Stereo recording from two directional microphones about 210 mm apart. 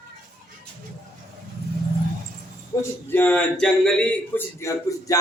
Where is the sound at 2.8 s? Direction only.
10° left (ahead or behind).